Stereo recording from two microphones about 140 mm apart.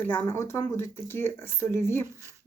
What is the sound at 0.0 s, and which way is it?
Speech, 15° left (ahead or behind).